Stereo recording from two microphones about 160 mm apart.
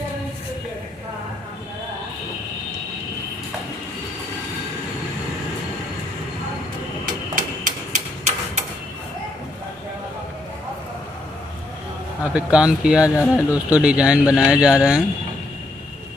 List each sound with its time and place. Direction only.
7.3 s a sound: 55° right (ahead or behind)
12.2 s speech: 5° right (ahead or behind)
13.1 s speech: 20° left (ahead or behind)
13.7 s speech: 10° right (ahead or behind)